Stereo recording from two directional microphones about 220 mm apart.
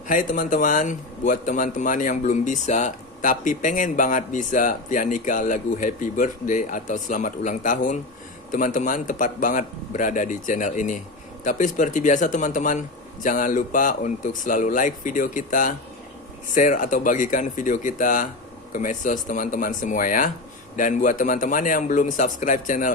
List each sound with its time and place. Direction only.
0.1 s speech: 35° left (ahead or behind)